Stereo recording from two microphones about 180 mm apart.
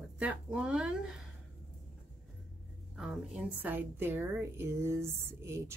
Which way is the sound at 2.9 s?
Centre (ahead or behind).